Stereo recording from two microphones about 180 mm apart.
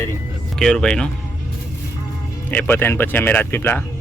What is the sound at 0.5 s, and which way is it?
Speech, 5° left (ahead or behind).